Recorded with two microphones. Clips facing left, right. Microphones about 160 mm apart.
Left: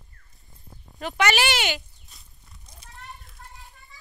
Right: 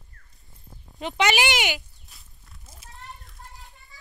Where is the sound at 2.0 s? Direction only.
Centre (ahead or behind).